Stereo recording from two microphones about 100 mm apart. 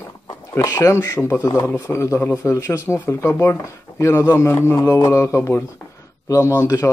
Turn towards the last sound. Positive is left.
turn(degrees=30)  # may be behind; listen again after turning